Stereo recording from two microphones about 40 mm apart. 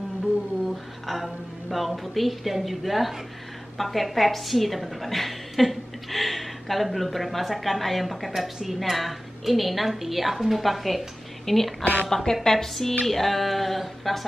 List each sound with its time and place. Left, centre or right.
1.0 s a woman's voice: centre
11.8 s a woman's voice: left
12.1 s a woman's voice: centre